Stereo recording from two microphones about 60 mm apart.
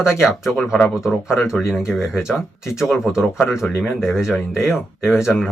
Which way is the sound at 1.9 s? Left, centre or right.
Centre.